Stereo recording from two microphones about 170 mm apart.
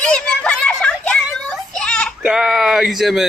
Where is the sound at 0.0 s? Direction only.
5° left (ahead or behind).